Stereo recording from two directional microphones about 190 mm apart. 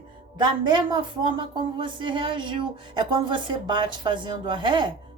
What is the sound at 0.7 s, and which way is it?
Speech, 25° right (ahead or behind).